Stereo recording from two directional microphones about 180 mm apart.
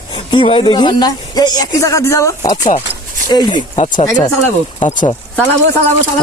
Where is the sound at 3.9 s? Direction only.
20° left (ahead or behind).